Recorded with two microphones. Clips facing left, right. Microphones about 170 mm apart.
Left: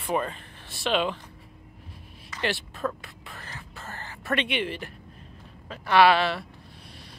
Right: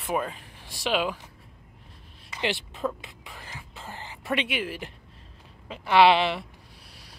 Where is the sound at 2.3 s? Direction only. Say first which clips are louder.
Even; 15° right (ahead or behind).